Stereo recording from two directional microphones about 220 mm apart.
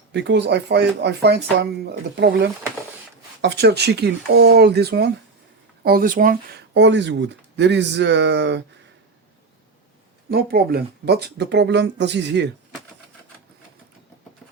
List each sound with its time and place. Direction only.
0.1 s speech: 50° right (ahead or behind)
10.2 s speech: 45° right (ahead or behind)